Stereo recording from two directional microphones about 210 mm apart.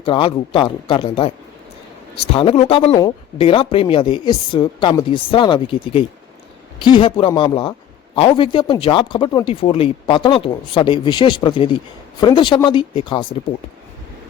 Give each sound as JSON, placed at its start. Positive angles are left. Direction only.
{"t": 0.0, "sound": "speech", "side_deg": 25}